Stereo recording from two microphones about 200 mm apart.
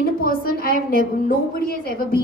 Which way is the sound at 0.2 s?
50° left (ahead or behind).